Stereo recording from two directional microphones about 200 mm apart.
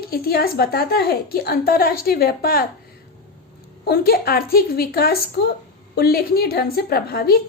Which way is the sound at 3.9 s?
50° left (ahead or behind).